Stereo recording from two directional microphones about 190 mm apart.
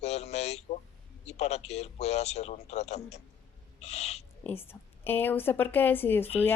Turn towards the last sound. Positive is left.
turn(degrees=10)  # may be behind; listen again after turning